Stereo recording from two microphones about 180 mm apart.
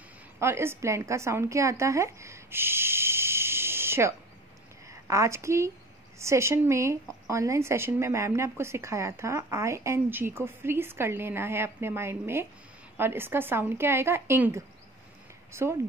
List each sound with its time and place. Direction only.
0.4 s a woman's voice: 15° right (ahead or behind)